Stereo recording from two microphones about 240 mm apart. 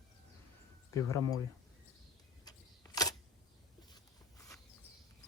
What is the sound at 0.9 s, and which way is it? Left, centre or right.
Speech, centre.